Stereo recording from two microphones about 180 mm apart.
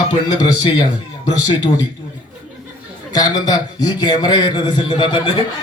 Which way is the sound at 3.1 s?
20° left (ahead or behind).